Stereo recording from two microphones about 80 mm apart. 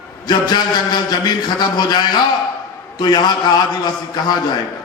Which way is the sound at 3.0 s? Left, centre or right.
Left.